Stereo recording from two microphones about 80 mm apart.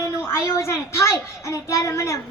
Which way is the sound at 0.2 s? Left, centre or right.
Left.